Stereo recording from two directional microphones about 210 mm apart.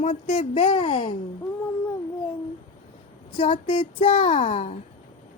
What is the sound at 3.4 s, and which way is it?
A child's voice, 25° left (ahead or behind).